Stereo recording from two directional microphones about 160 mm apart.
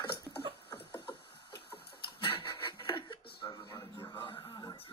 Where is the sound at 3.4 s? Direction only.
30° left (ahead or behind).